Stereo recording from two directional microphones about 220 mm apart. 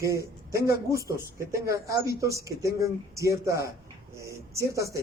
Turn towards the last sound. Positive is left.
turn(degrees=-15)  # may be behind; listen again after turning